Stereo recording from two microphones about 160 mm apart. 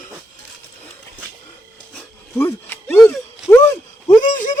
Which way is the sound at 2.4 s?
15° left (ahead or behind).